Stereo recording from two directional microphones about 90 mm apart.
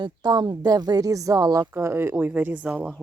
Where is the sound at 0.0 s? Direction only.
50° right (ahead or behind).